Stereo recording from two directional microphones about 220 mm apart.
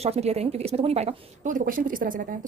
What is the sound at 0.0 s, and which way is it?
A woman's voice, 30° right (ahead or behind).